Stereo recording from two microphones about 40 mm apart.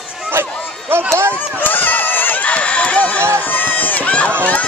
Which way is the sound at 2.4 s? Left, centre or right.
Left.